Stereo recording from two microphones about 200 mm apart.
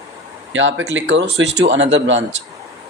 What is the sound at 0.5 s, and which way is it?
Speech, 70° right (ahead or behind).